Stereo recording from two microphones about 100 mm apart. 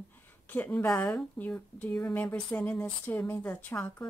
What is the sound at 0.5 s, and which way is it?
A woman's voice, 15° left (ahead or behind).